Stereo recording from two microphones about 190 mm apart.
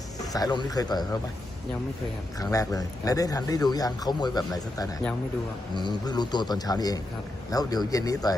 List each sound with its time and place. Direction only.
0.3 s speech: 20° left (ahead or behind)
2.4 s speech: 20° left (ahead or behind)